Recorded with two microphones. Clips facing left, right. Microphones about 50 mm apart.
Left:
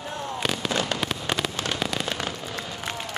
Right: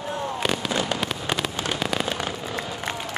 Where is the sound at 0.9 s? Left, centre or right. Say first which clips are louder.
Right 1 dB; centre.